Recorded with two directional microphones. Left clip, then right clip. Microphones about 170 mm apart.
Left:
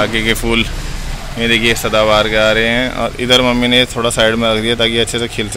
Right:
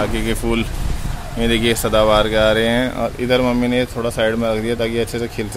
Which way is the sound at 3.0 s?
5° right (ahead or behind).